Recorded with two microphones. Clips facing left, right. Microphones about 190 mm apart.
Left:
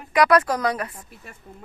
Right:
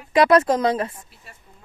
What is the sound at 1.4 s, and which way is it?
Speech, 55° left (ahead or behind).